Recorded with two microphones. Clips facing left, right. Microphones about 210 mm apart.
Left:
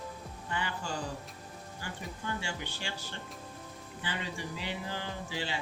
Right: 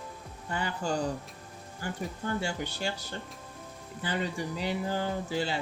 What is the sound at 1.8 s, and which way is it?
Speech, 45° right (ahead or behind).